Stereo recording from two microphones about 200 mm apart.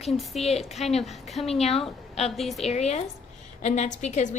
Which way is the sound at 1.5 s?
30° left (ahead or behind).